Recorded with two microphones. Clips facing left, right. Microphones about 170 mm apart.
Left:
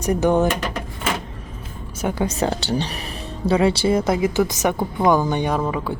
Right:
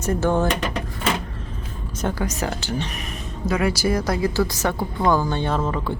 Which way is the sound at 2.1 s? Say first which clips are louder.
Left 4 dB; 30° left (ahead or behind).